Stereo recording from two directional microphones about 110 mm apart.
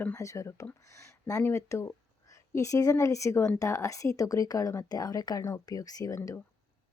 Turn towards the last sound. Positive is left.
turn(degrees=30)  # may be behind; listen again after turning